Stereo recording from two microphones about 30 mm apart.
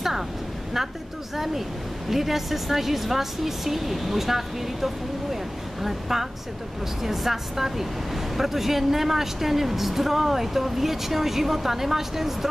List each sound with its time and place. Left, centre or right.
1.3 s speech: centre